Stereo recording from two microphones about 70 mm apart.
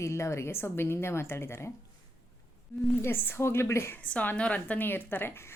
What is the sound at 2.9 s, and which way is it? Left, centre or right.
A woman's voice, left.